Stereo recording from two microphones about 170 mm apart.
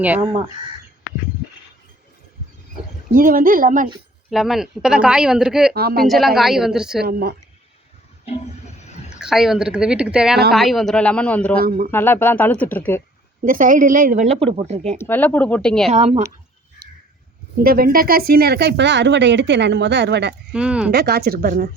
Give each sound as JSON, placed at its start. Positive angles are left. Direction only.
{"t": 3.2, "sound": "speech", "side_deg": -55}
{"t": 4.3, "sound": "speech", "side_deg": 0}
{"t": 5.7, "sound": "speech", "side_deg": -65}
{"t": 6.0, "sound": "speech", "side_deg": 0}
{"t": 7.0, "sound": "speech", "side_deg": -65}
{"t": 9.1, "sound": "speech", "side_deg": -5}
{"t": 11.6, "sound": "speech", "side_deg": -60}
{"t": 11.9, "sound": "speech", "side_deg": 10}
{"t": 13.4, "sound": "speech", "side_deg": -55}
{"t": 14.9, "sound": "speech", "side_deg": 10}
{"t": 15.9, "sound": "speech", "side_deg": -40}
{"t": 17.6, "sound": "speech", "side_deg": -60}
{"t": 20.5, "sound": "speech", "side_deg": -5}
{"t": 20.9, "sound": "speech", "side_deg": -70}